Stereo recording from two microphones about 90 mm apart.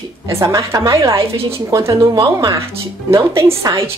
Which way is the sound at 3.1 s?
30° right (ahead or behind).